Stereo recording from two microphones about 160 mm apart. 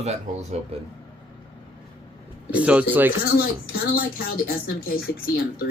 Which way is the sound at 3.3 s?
70° left (ahead or behind).